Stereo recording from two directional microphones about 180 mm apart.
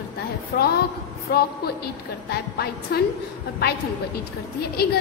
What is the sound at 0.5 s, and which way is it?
A woman's voice, 60° left (ahead or behind).